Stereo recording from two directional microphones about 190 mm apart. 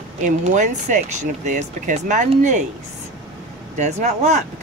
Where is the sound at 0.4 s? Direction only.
40° right (ahead or behind).